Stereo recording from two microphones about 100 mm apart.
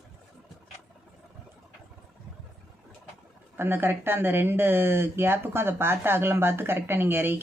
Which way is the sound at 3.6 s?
20° right (ahead or behind).